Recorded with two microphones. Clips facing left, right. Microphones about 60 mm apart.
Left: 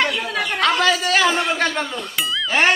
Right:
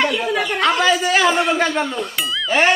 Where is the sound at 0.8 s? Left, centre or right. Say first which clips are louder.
Right 2 dB; centre.